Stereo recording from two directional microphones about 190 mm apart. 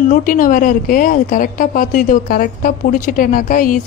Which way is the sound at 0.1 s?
45° left (ahead or behind).